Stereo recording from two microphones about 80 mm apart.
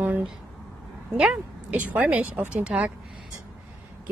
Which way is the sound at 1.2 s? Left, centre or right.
Centre.